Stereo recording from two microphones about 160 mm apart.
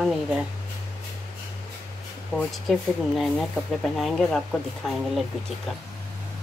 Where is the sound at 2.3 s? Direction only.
Centre (ahead or behind).